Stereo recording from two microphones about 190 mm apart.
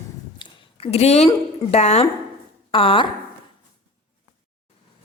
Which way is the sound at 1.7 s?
35° left (ahead or behind).